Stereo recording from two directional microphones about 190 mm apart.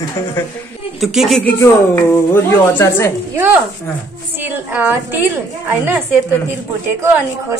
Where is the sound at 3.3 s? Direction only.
10° right (ahead or behind).